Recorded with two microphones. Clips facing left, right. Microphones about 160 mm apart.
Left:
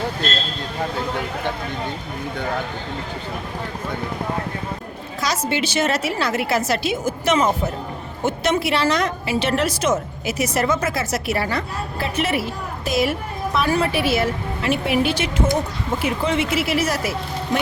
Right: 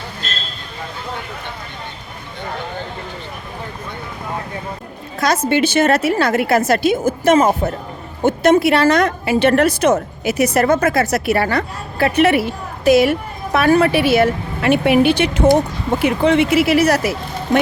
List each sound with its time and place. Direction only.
5.2 s a woman's voice: 55° right (ahead or behind)